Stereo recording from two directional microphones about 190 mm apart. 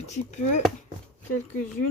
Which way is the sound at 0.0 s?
40° left (ahead or behind).